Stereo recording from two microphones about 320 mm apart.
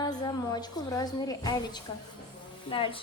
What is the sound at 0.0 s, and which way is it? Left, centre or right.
A woman's voice, centre.